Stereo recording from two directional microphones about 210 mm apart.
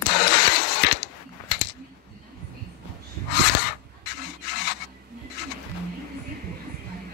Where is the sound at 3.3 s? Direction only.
55° left (ahead or behind).